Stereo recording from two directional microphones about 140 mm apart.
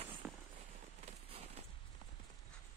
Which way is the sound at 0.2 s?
Centre (ahead or behind).